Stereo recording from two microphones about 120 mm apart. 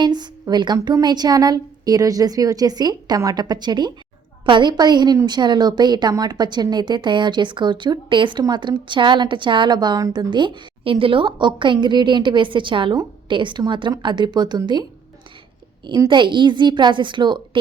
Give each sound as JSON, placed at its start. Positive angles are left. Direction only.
{"t": 0.0, "sound": "speech", "side_deg": -35}
{"t": 16.0, "sound": "speech", "side_deg": -40}